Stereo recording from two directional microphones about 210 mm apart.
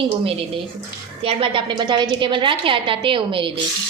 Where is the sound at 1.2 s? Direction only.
25° right (ahead or behind).